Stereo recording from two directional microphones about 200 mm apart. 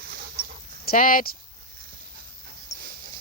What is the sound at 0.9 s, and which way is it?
Speech, 45° left (ahead or behind).